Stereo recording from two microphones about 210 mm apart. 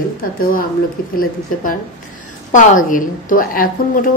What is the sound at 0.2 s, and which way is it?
Speech, 45° left (ahead or behind).